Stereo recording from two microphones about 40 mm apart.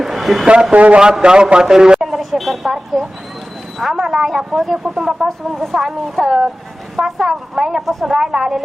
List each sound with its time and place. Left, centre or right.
0.0 s a sound: centre
0.4 s a man's voice: right
2.4 s speech: centre